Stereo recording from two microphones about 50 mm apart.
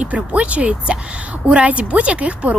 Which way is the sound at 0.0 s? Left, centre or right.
Right.